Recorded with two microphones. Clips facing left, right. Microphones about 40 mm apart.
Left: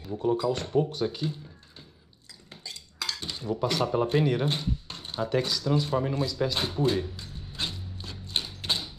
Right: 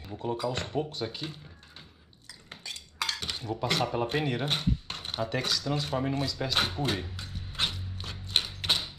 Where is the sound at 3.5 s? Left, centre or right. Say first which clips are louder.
Left 3 dB; right.